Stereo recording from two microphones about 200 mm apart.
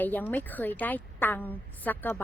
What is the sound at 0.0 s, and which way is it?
A woman's voice, 10° left (ahead or behind).